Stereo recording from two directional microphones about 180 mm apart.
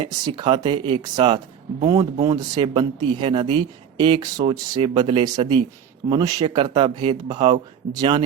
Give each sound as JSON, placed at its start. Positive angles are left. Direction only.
{"t": 0.0, "sound": "speech", "side_deg": -25}